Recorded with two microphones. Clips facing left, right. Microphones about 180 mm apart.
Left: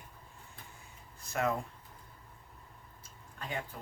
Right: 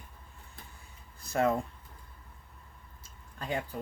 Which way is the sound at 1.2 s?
30° right (ahead or behind).